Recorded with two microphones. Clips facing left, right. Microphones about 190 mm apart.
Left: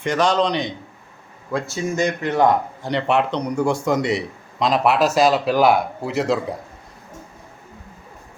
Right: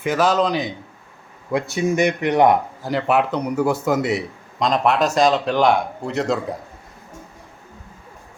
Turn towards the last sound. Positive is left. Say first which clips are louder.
# left 1 dB
turn(degrees=0)  # may be behind; listen again after turning